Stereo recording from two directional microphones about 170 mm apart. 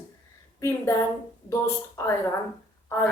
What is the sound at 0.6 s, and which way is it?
Speech, 15° left (ahead or behind).